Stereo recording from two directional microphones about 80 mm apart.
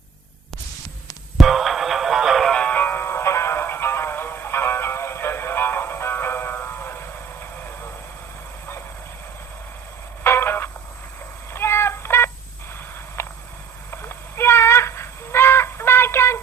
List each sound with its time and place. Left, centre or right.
1.4 s music: centre
2.5 s music: centre
10.2 s music: left
11.5 s cat: left
13.2 s a sound: left